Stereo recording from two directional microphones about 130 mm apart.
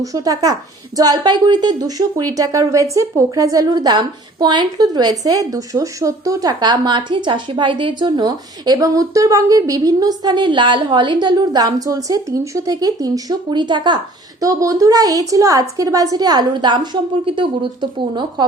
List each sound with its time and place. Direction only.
0.0 s speech: 25° right (ahead or behind)
14.4 s a woman's voice: 25° right (ahead or behind)